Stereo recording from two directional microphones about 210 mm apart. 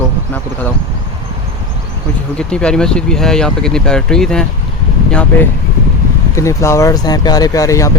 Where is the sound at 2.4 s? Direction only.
5° left (ahead or behind).